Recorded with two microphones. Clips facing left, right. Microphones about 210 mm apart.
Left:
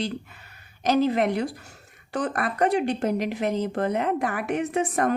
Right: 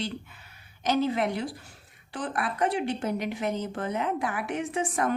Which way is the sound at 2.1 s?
45° left (ahead or behind).